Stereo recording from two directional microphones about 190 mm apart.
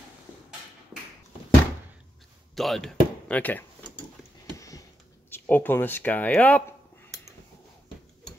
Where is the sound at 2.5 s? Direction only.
Centre (ahead or behind).